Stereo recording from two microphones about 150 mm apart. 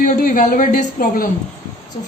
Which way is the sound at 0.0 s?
60° left (ahead or behind).